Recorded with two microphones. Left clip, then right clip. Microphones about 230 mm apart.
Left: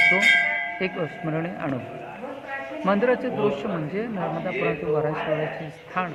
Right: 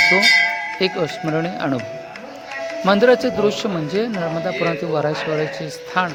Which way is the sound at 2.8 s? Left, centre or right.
Right.